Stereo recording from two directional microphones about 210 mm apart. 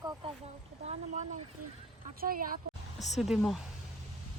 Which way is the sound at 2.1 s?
40° right (ahead or behind).